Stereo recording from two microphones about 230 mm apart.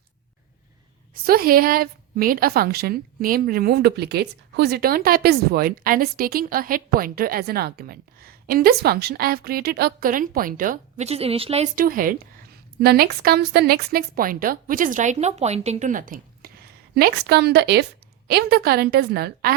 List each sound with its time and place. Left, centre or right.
1.1 s a woman's voice: right